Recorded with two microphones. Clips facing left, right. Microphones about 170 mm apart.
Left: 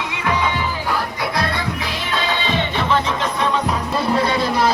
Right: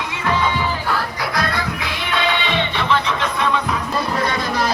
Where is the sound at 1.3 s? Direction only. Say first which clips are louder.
Right 1 dB; 30° left (ahead or behind).